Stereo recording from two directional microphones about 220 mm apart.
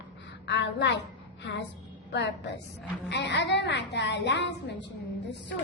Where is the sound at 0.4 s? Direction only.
50° left (ahead or behind).